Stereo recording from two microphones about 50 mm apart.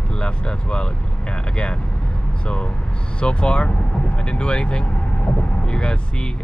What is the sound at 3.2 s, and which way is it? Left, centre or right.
Speech, left.